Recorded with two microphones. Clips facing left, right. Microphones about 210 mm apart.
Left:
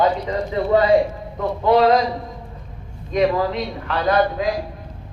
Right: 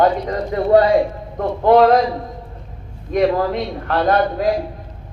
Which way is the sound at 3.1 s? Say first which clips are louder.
Right 2 dB; 55° right (ahead or behind).